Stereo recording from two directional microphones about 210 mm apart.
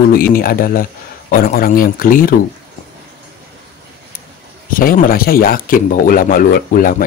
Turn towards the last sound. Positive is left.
turn(degrees=40)  # may be behind; listen again after turning